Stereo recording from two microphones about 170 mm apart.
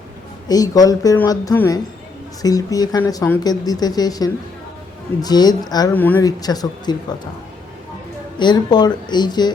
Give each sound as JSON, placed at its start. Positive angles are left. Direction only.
{"t": 0.4, "sound": "speech", "side_deg": 20}
{"t": 5.9, "sound": "speech", "side_deg": 10}
{"t": 6.4, "sound": "speech", "side_deg": 20}
{"t": 8.4, "sound": "speech", "side_deg": 25}